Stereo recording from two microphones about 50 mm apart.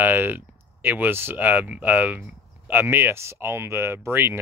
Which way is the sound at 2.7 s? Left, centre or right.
Right.